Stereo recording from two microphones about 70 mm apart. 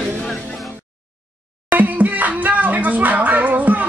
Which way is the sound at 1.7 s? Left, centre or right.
Right.